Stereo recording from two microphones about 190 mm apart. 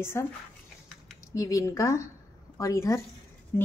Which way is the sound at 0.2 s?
15° left (ahead or behind).